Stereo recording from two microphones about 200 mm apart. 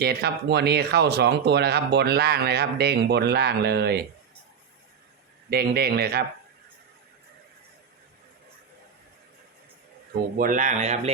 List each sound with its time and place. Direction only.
0.0 s speech: 55° right (ahead or behind)
5.5 s speech: 50° right (ahead or behind)
10.3 s a man's voice: 45° right (ahead or behind)